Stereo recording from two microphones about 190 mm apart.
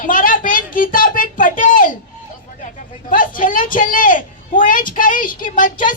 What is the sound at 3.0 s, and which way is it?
A woman's voice, 45° left (ahead or behind).